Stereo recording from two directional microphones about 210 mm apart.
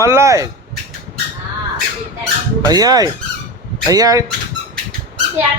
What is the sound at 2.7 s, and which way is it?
Speech, 15° right (ahead or behind).